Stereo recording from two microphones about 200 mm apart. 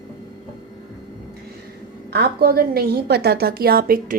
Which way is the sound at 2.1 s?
50° right (ahead or behind).